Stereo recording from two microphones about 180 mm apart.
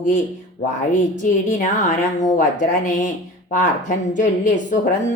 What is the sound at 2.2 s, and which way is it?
Speech, 45° left (ahead or behind).